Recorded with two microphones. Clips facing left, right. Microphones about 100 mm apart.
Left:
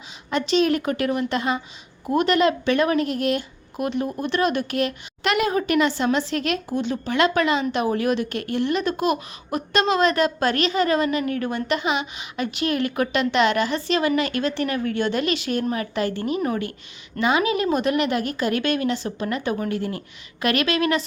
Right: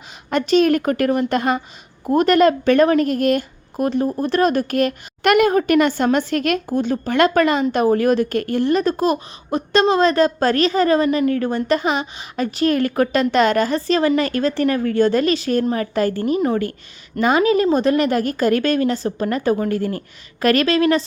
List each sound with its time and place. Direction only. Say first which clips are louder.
0.3 s a woman's voice: right 5 dB; 50° right (ahead or behind); by 21.0 s 35° right (ahead or behind)